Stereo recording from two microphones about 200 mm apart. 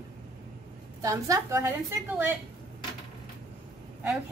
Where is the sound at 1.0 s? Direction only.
15° right (ahead or behind).